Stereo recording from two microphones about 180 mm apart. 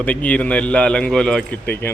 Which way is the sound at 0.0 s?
10° left (ahead or behind).